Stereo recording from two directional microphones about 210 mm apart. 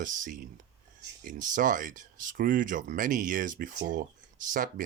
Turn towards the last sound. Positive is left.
turn(degrees=-40)  # may be behind; listen again after turning